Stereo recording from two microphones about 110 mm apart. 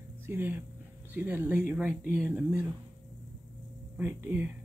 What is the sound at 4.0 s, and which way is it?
Speech, 15° right (ahead or behind).